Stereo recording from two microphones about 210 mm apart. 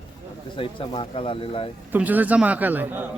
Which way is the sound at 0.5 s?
25° left (ahead or behind).